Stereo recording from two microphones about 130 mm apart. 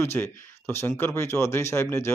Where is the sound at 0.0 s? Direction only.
20° left (ahead or behind).